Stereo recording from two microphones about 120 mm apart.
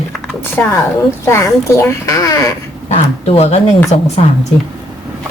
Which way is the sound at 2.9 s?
60° left (ahead or behind).